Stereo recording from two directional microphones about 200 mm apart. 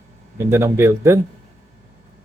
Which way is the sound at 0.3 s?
15° right (ahead or behind).